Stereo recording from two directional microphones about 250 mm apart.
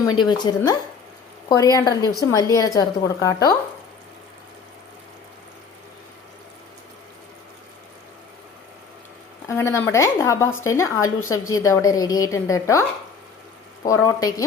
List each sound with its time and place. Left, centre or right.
0.2 s a woman's voice: centre
9.6 s a woman's voice: centre
13.8 s a woman's voice: centre